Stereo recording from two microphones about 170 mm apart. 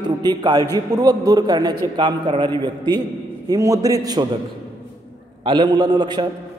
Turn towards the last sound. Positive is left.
turn(degrees=-25)  # may be behind; listen again after turning